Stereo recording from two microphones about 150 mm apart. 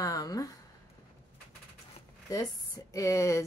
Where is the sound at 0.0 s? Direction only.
25° left (ahead or behind).